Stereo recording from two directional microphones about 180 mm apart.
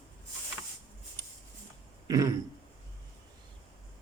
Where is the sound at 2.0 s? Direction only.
20° right (ahead or behind).